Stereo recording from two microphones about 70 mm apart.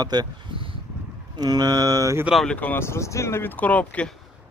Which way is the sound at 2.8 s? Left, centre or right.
Left.